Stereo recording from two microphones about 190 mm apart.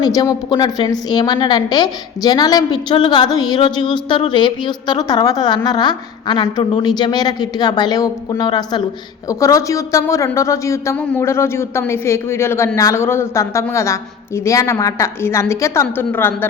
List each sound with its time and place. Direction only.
0.0 s a woman's voice: 20° left (ahead or behind)